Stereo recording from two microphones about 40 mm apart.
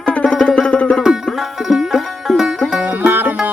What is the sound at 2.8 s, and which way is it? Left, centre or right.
Music, right.